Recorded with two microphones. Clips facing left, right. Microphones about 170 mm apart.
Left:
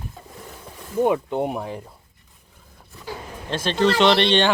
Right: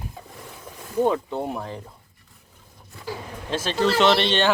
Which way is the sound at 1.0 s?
15° left (ahead or behind).